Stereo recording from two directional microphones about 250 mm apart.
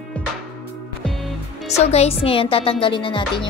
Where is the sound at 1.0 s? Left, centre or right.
Centre.